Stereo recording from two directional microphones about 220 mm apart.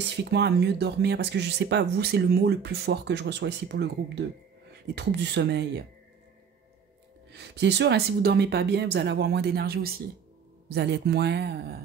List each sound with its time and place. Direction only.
0.0 s speech: 50° right (ahead or behind)
7.3 s speech: 50° right (ahead or behind)